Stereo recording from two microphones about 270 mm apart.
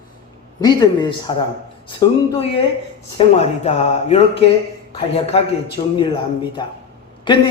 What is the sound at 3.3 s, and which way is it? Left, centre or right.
A man's voice, left.